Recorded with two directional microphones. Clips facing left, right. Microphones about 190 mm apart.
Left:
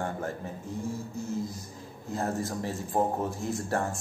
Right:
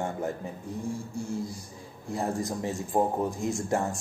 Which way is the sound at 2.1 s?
15° right (ahead or behind).